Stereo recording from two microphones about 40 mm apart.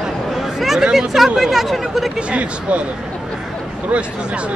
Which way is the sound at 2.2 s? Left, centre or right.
Right.